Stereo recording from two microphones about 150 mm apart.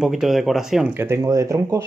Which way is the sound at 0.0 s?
Centre (ahead or behind).